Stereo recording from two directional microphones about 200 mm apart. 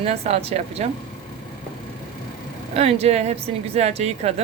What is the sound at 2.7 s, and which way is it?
A woman's voice, 30° right (ahead or behind).